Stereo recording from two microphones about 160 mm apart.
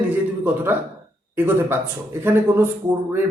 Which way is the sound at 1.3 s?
15° right (ahead or behind).